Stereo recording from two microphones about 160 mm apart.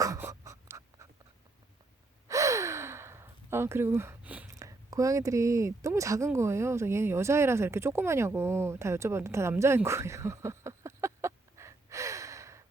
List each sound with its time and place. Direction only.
0.0 s writing: 20° right (ahead or behind)
2.2 s sigh: 20° right (ahead or behind)
4.5 s speech: 20° right (ahead or behind)